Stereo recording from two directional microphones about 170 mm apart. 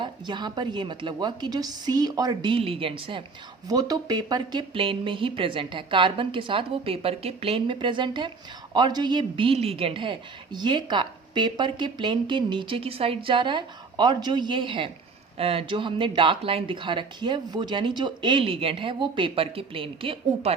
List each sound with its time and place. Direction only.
0.0 s speech: 25° right (ahead or behind)